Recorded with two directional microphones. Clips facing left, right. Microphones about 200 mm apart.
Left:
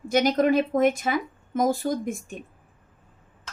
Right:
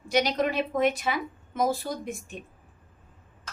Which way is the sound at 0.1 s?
50° left (ahead or behind).